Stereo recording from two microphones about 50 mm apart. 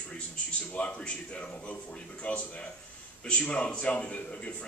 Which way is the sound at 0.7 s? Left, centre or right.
Left.